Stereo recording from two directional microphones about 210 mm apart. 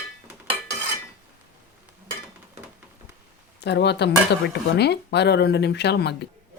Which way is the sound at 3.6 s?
55° left (ahead or behind).